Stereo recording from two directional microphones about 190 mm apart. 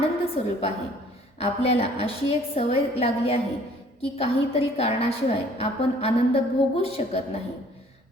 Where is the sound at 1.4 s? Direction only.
30° left (ahead or behind).